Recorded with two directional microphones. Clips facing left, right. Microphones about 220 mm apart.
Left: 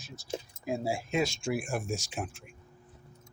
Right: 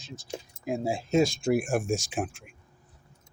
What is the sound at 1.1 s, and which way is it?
Speech, 45° right (ahead or behind).